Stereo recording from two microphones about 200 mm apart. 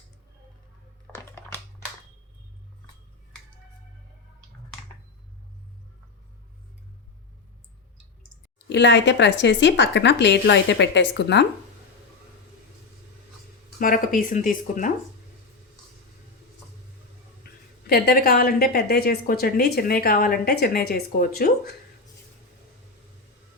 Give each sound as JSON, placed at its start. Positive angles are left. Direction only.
{"t": 1.1, "sound": "a sound", "side_deg": 5}
{"t": 8.7, "sound": "speech", "side_deg": 65}
{"t": 13.7, "sound": "a woman's voice", "side_deg": 45}
{"t": 17.8, "sound": "a woman's voice", "side_deg": 50}